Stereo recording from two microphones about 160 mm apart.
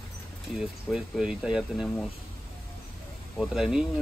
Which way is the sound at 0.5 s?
5° right (ahead or behind).